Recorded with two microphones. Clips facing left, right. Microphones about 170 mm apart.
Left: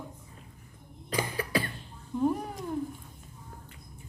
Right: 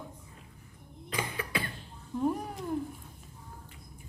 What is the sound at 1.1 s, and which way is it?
Cough, 35° left (ahead or behind).